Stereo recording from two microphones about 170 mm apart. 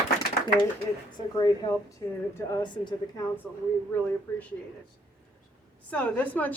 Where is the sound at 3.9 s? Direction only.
10° left (ahead or behind).